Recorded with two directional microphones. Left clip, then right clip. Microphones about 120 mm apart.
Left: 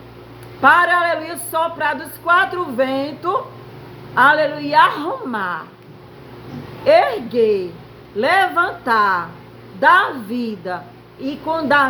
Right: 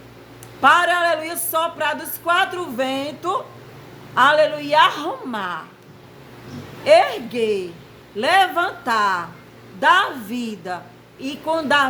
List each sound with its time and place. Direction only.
0.6 s a woman's voice: 25° right (ahead or behind)
6.8 s a woman's voice: 25° right (ahead or behind)